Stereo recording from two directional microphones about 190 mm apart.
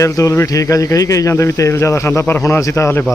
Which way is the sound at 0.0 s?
15° left (ahead or behind).